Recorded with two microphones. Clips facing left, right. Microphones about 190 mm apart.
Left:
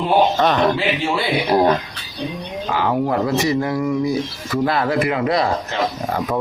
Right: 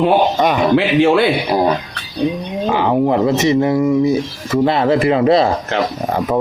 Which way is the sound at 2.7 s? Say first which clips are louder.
Right 4 dB; 20° right (ahead or behind).